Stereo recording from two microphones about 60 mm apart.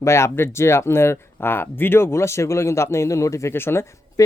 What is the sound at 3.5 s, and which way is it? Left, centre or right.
Speech, left.